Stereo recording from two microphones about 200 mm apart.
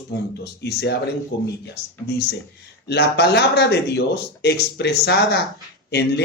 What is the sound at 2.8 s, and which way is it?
Speech, 55° left (ahead or behind).